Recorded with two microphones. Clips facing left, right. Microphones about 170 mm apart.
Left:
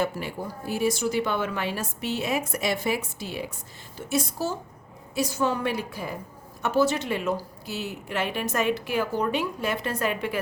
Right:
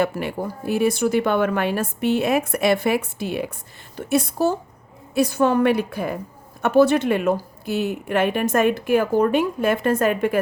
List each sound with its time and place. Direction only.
0.0 s a woman's voice: 65° right (ahead or behind)